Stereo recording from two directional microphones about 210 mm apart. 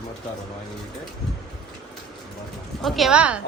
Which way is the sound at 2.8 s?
Centre (ahead or behind).